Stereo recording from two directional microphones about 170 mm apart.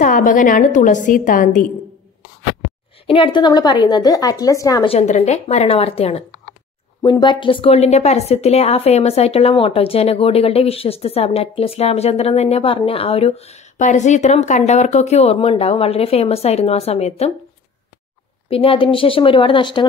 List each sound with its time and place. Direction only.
0.0 s a woman's voice: 50° left (ahead or behind)
3.1 s a woman's voice: 30° left (ahead or behind)
4.8 s a woman's voice: 40° left (ahead or behind)
7.0 s a woman's voice: 25° left (ahead or behind)
18.5 s a woman's voice: 35° left (ahead or behind)